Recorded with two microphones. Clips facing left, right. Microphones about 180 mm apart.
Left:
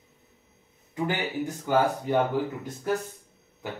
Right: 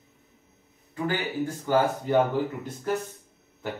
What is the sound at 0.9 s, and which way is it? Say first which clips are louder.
Speech: even; 20° left (ahead or behind).